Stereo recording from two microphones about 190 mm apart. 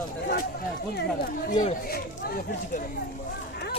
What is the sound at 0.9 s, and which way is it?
Speech, 50° left (ahead or behind).